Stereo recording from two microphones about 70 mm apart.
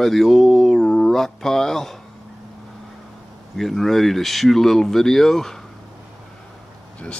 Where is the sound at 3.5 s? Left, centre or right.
Centre.